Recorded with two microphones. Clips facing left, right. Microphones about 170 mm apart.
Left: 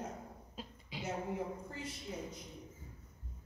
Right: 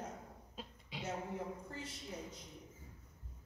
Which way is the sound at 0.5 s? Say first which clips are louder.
Left 1 dB; 5° left (ahead or behind).